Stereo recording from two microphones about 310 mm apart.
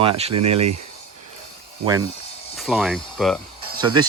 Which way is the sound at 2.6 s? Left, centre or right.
Centre.